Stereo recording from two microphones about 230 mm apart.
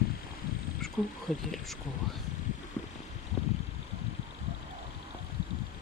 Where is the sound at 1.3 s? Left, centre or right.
Centre.